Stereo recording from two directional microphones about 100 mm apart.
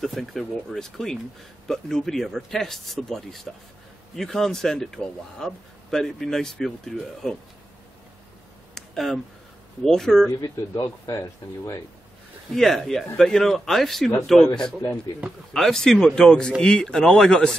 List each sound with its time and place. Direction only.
0.0 s speech: centre (ahead or behind)
8.7 s a sound: 5° left (ahead or behind)
9.8 s speech: 5° left (ahead or behind)
10.8 s speech: 30° left (ahead or behind)
12.5 s speech: 5° left (ahead or behind)